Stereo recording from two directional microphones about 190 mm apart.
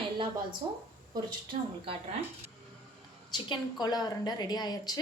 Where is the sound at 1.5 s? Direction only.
35° right (ahead or behind).